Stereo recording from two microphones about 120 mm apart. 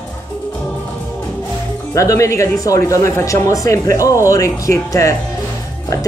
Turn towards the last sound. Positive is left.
turn(degrees=25)  # may be behind; listen again after turning